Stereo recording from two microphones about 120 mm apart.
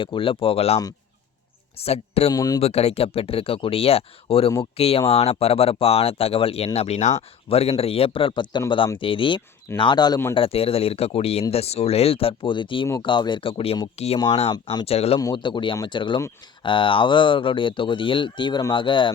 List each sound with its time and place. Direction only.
0.0 s speech: 45° left (ahead or behind)
1.8 s speech: 60° left (ahead or behind)
2.3 s speech: 30° left (ahead or behind)
2.6 s speech: 60° left (ahead or behind); by 10.2 s 35° left (ahead or behind)
10.3 s speech: 50° left (ahead or behind)
13.9 s speech: 60° left (ahead or behind)
14.5 s speech: 35° left (ahead or behind)
14.8 s speech: 55° left (ahead or behind)
15.2 s speech: 35° left (ahead or behind)